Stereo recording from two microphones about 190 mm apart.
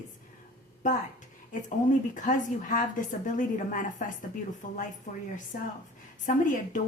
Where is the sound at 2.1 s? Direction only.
40° left (ahead or behind).